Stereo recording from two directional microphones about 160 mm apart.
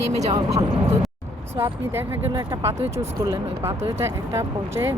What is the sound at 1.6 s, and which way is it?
Speech, 15° right (ahead or behind).